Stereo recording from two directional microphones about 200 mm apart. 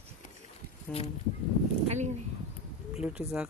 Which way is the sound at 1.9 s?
35° right (ahead or behind).